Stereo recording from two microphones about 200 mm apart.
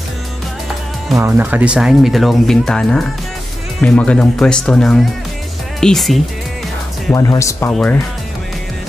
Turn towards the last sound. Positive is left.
turn(degrees=5)  # may be behind; listen again after turning